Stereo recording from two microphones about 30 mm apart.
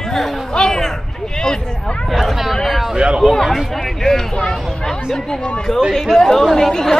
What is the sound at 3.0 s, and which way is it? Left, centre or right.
Speech, right.